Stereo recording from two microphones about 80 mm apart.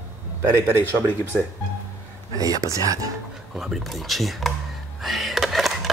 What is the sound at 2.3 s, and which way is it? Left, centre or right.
Speech, right.